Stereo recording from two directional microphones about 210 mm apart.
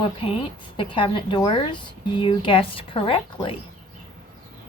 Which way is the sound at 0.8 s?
25° left (ahead or behind).